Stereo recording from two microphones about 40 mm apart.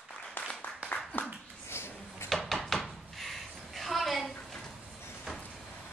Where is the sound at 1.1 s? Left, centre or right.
Left.